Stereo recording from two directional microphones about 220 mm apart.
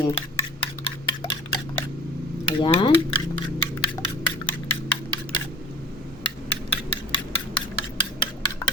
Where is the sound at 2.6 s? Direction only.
25° left (ahead or behind).